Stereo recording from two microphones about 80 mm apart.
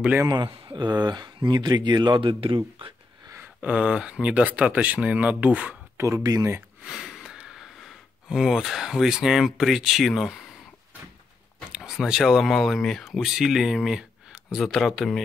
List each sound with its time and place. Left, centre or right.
0.3 s speech: right
3.6 s speech: centre
5.9 s speech: right
6.8 s speech: centre
11.7 s speech: centre